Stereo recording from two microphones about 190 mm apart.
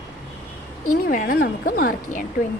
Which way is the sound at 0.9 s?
45° left (ahead or behind).